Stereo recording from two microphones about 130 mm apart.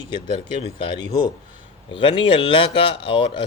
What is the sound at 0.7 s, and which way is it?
A man's voice, 40° left (ahead or behind).